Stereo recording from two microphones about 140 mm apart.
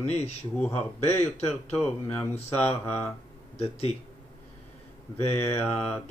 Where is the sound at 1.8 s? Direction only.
15° left (ahead or behind).